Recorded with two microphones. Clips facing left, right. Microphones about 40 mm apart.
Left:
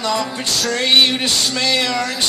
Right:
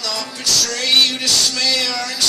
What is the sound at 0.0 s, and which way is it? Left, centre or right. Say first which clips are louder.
Music: left 5 dB; left.